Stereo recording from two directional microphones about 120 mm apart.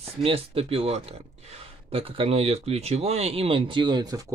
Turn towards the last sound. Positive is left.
turn(degrees=-40)  # may be behind; listen again after turning